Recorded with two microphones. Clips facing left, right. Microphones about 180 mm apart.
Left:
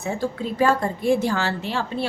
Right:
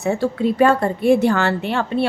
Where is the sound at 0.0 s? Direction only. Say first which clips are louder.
Right 7 dB; 70° right (ahead or behind).